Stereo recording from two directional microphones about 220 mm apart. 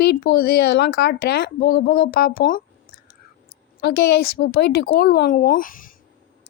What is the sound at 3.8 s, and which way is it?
Speech, 45° left (ahead or behind).